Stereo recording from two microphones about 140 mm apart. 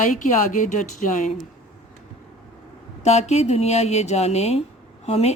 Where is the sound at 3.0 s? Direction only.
50° left (ahead or behind).